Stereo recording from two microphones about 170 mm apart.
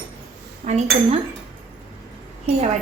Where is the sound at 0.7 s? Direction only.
40° right (ahead or behind).